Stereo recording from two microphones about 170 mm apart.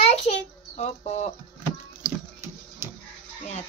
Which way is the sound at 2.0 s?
15° right (ahead or behind).